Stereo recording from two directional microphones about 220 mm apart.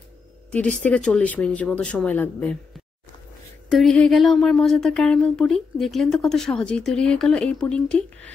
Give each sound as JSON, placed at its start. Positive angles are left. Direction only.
{"t": 0.5, "sound": "speech", "side_deg": 5}
{"t": 3.7, "sound": "speech", "side_deg": 5}